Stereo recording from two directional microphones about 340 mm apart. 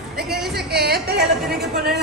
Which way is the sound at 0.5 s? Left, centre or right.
Right.